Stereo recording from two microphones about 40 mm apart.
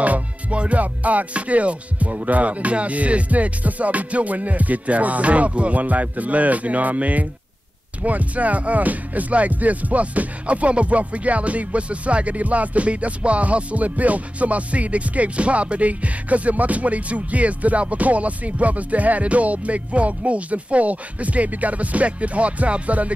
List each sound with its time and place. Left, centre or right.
0.0 s music: right